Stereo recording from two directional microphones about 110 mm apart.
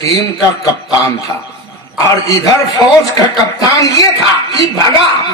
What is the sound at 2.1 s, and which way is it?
Speech, 30° left (ahead or behind).